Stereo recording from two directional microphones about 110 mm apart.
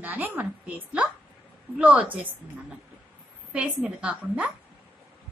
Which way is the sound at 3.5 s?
10° right (ahead or behind).